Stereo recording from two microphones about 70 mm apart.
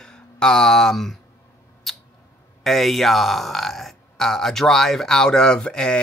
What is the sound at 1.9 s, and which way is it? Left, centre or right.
Mouse, centre.